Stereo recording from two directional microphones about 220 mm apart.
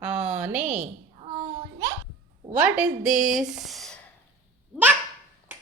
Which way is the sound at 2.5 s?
5° right (ahead or behind).